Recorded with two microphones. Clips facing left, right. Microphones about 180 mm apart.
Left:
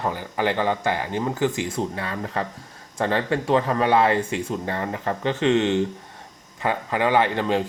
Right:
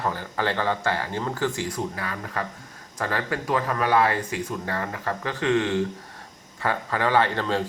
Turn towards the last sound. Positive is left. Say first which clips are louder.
# left 2 dB
turn(degrees=15)  # may be behind; listen again after turning